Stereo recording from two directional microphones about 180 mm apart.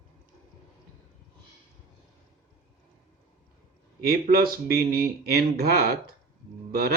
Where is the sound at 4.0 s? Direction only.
60° right (ahead or behind).